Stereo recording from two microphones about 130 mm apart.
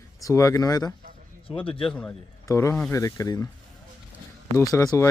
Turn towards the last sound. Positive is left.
turn(degrees=25)  # may be behind; listen again after turning